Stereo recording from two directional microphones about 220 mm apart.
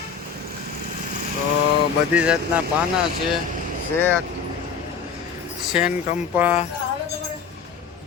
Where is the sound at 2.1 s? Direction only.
5° right (ahead or behind).